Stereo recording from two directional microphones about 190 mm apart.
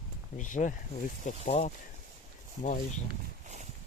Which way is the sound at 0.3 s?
40° left (ahead or behind).